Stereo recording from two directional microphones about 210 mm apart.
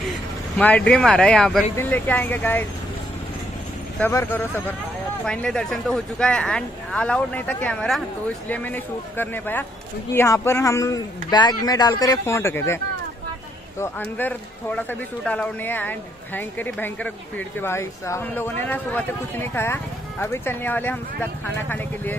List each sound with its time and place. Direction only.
0.6 s speech: 5° left (ahead or behind)
4.0 s speech: 10° left (ahead or behind)